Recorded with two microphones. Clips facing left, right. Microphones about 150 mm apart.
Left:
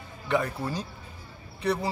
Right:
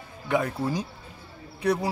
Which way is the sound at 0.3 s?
10° right (ahead or behind).